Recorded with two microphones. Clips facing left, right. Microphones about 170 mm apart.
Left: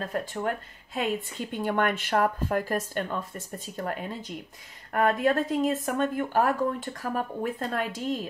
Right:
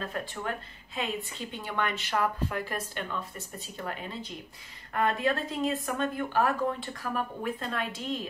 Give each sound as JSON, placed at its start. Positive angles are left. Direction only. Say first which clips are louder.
{"t": 0.0, "sound": "speech", "louder": "left 5 dB", "side_deg": 40}